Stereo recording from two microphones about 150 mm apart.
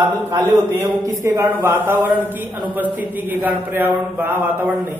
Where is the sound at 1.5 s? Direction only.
15° right (ahead or behind).